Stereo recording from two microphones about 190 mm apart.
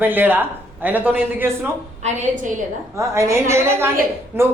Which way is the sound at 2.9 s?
15° right (ahead or behind).